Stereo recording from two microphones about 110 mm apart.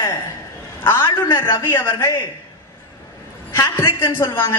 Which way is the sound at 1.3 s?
25° left (ahead or behind).